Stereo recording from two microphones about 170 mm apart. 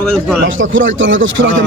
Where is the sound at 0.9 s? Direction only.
90° right.